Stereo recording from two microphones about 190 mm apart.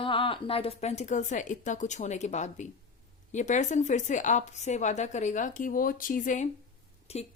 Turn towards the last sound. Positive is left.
turn(degrees=35)  # may be behind; listen again after turning